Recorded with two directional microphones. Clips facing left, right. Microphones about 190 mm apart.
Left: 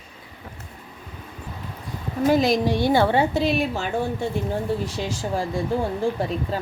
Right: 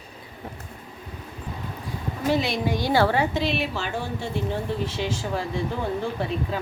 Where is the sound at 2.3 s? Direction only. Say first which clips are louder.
Left 4 dB; 45° left (ahead or behind).